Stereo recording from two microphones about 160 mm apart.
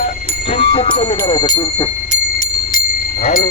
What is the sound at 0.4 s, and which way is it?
Speech, 35° left (ahead or behind).